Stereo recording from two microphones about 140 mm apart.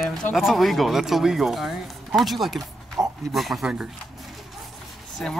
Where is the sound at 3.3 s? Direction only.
Centre (ahead or behind).